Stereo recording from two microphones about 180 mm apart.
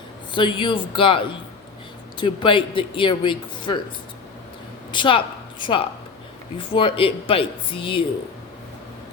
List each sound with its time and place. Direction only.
0.3 s speech: 25° left (ahead or behind)
4.9 s a woman's voice: 25° left (ahead or behind)